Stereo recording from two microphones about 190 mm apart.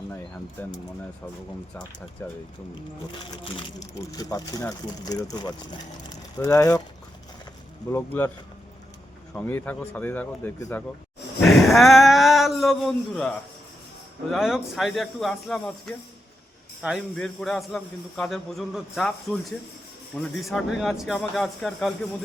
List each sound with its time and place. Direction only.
2.2 s speech: 10° left (ahead or behind)
3.4 s speech: 20° left (ahead or behind)
7.9 s speech: 10° left (ahead or behind)
9.3 s a man's voice: 10° left (ahead or behind)